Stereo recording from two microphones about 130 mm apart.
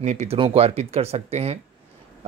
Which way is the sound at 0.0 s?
60° right (ahead or behind).